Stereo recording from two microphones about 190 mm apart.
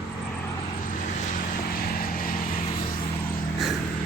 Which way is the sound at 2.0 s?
50° left (ahead or behind).